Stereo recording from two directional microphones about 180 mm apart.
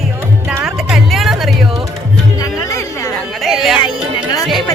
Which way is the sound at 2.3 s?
20° left (ahead or behind).